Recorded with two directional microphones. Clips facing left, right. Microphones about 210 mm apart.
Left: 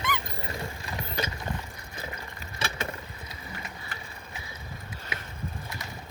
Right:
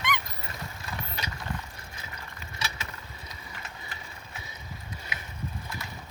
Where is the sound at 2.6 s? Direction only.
55° left (ahead or behind).